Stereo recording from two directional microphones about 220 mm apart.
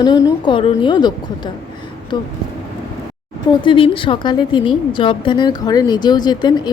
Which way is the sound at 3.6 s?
25° left (ahead or behind).